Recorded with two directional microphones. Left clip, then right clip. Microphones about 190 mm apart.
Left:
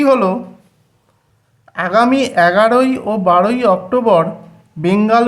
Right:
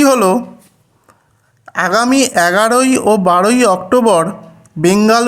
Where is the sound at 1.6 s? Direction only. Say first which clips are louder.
Even; 35° right (ahead or behind).